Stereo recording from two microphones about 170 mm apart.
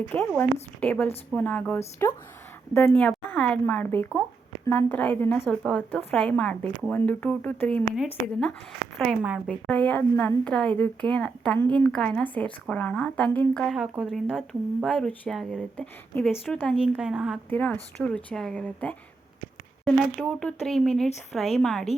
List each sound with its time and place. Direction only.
0.1 s a woman's voice: 10° left (ahead or behind)
9.0 s speech: 5° right (ahead or behind)
9.5 s a woman's voice: 10° left (ahead or behind)
14.8 s speech: 5° left (ahead or behind)
17.5 s a woman's voice: 10° left (ahead or behind)